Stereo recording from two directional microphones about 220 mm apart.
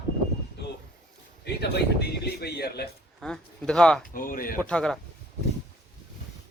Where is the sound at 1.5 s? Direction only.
50° left (ahead or behind).